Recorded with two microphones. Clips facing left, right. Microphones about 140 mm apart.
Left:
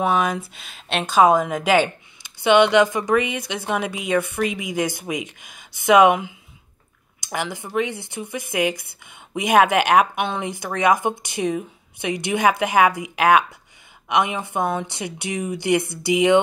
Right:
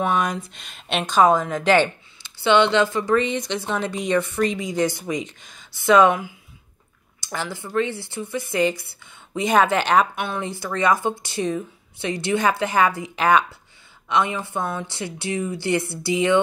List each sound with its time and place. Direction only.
0.0 s speech: 5° left (ahead or behind)